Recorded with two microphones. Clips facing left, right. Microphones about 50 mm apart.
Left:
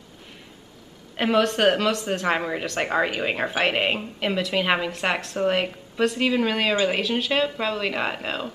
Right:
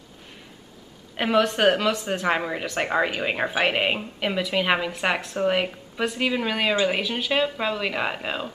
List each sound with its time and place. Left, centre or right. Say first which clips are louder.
1.1 s speech: even; centre